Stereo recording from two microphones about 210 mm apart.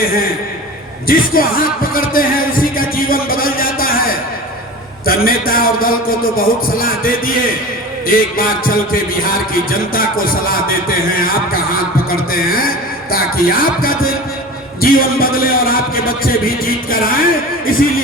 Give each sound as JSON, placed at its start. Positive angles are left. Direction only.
{"t": 0.0, "sound": "a man's voice", "side_deg": 45}